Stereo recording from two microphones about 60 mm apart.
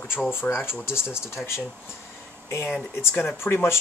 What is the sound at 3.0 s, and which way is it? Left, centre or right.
Speech, left.